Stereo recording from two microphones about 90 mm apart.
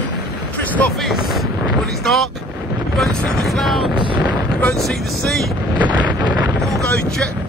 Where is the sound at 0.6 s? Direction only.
20° left (ahead or behind).